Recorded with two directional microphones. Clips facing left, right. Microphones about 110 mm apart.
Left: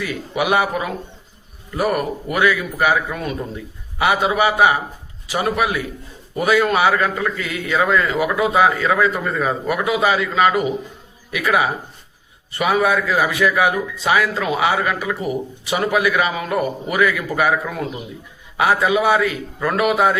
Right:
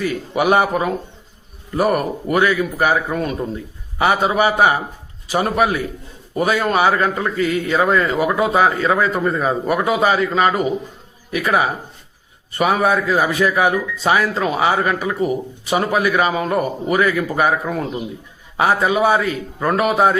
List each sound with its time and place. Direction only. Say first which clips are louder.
0.0 s a man's voice: right 4 dB; 40° right (ahead or behind)